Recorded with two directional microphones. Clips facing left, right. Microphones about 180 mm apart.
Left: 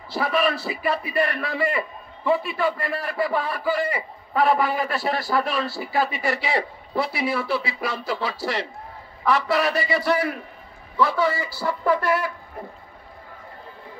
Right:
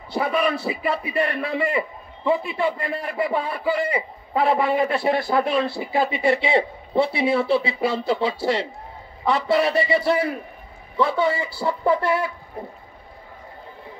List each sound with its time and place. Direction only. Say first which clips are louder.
0.1 s a man's voice: right 1 dB; 20° right (ahead or behind)